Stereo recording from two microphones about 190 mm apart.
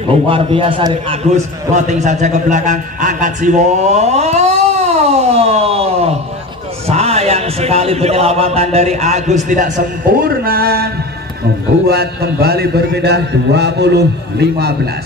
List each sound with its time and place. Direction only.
0.3 s a man's voice: 30° right (ahead or behind); by 10.9 s 55° right (ahead or behind)
11.9 s a man's voice: 55° right (ahead or behind)